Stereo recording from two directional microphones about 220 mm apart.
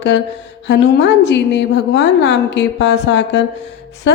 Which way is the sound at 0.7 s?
50° left (ahead or behind).